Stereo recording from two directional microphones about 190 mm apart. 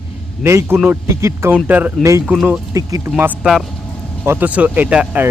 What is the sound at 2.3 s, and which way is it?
Speech, 5° right (ahead or behind).